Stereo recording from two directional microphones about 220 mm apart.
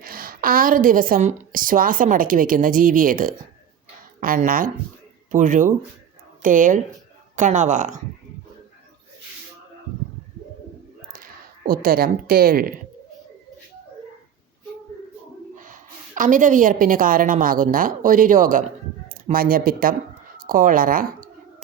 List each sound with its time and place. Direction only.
0.0 s a woman's voice: 40° right (ahead or behind)
11.1 s speech: 40° right (ahead or behind)
15.5 s a woman's voice: 35° right (ahead or behind)